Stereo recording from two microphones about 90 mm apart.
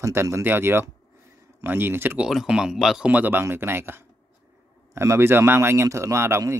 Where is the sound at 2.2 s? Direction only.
10° right (ahead or behind).